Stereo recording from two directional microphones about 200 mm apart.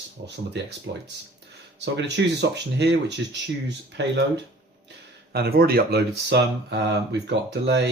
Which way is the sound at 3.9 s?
60° right (ahead or behind).